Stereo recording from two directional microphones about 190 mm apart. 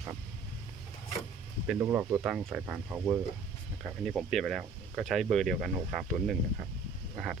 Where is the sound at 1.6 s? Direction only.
5° right (ahead or behind).